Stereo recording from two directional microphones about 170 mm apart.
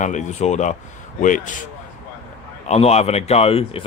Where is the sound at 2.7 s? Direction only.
40° left (ahead or behind).